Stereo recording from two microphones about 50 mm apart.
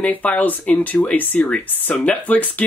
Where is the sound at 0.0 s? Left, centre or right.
Left.